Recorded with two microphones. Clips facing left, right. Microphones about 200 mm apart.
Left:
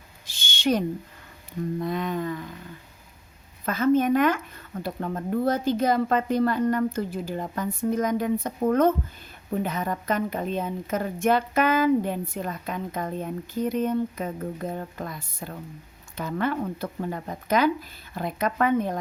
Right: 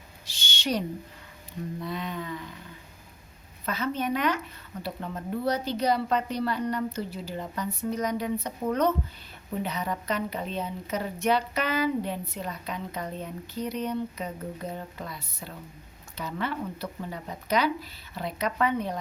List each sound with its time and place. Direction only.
0.3 s owl: 50° left (ahead or behind)
1.8 s a woman's voice: 50° left (ahead or behind)
3.7 s a woman's voice: 50° left (ahead or behind)